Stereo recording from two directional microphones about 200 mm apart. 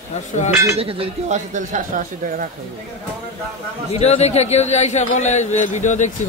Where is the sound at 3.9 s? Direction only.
30° left (ahead or behind).